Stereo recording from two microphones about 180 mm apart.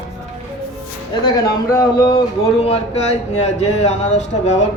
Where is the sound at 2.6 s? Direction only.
35° left (ahead or behind).